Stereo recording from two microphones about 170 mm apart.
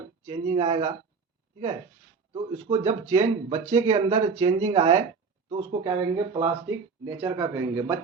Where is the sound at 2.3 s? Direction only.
35° right (ahead or behind).